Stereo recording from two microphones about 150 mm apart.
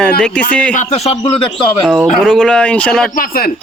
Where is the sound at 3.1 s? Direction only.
75° left (ahead or behind).